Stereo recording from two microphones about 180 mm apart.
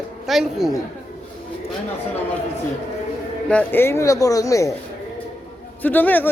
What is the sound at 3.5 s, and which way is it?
Speech, 10° left (ahead or behind).